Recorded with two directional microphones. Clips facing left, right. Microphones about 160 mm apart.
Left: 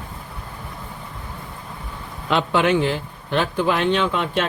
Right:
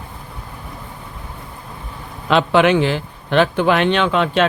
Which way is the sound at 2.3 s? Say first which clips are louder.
Right 5 dB; 90° right.